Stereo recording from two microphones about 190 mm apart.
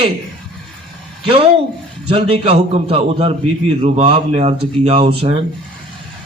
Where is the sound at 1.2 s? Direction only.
30° right (ahead or behind).